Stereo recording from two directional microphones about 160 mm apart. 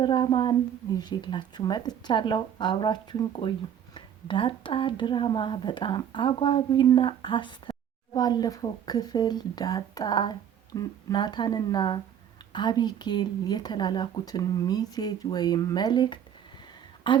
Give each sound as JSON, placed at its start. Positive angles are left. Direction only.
{"t": 0.0, "sound": "a woman's voice", "side_deg": 25}